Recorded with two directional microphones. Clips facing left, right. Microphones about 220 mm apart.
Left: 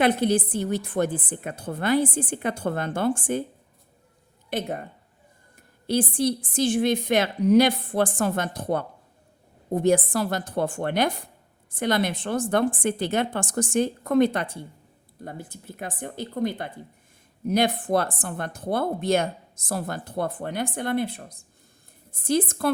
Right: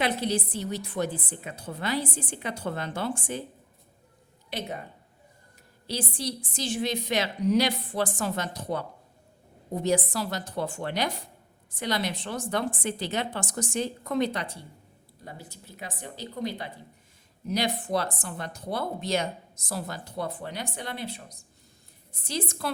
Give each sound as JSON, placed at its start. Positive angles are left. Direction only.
{"t": 0.0, "sound": "a woman's voice", "side_deg": 55}
{"t": 4.4, "sound": "speech", "side_deg": 50}
{"t": 5.9, "sound": "a woman's voice", "side_deg": 55}